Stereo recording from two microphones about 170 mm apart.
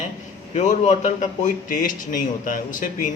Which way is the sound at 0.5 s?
45° left (ahead or behind).